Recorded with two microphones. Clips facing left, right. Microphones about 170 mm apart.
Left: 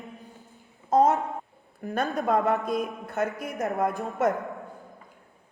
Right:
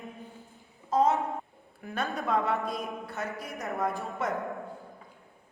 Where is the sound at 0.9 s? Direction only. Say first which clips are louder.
Left 4 dB; 40° left (ahead or behind).